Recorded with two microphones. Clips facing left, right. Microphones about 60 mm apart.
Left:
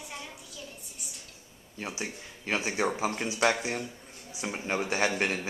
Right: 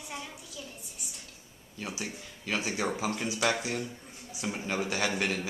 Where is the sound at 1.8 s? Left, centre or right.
Left.